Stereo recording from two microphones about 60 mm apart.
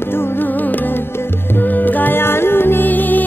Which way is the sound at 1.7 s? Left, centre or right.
Left.